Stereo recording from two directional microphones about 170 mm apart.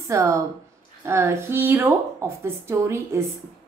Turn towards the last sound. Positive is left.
turn(degrees=-15)  # may be behind; listen again after turning